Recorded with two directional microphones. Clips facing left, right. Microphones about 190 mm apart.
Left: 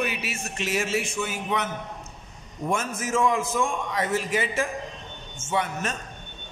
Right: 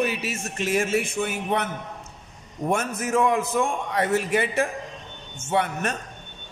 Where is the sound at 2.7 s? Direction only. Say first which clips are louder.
Right 3 dB; 60° right (ahead or behind).